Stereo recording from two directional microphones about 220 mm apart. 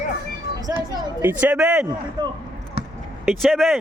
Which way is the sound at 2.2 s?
20° right (ahead or behind).